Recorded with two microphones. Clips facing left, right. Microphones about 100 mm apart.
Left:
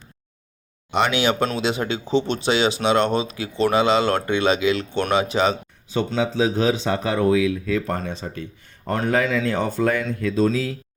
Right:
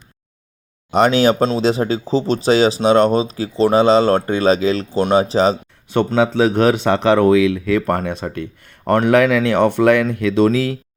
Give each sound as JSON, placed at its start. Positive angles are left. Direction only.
{"t": 0.9, "sound": "speech", "side_deg": -40}
{"t": 6.1, "sound": "speech", "side_deg": -65}